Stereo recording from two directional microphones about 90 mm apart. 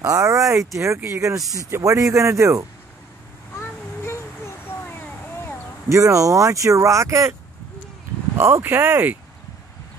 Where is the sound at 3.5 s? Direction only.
30° left (ahead or behind).